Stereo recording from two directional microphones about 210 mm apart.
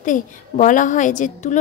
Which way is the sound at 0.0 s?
40° left (ahead or behind).